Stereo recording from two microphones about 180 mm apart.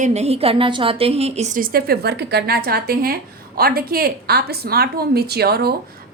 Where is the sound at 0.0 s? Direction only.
40° right (ahead or behind).